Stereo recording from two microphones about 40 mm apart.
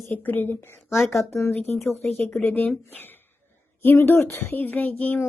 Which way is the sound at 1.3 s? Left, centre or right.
Left.